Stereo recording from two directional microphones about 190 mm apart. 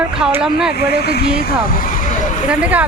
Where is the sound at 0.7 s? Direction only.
55° left (ahead or behind).